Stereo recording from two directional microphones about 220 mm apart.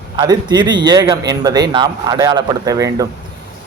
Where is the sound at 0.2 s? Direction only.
20° right (ahead or behind).